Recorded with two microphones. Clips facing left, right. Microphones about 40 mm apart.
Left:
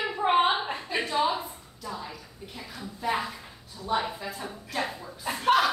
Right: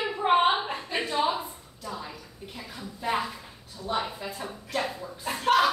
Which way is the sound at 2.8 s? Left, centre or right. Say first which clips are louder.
Even; centre.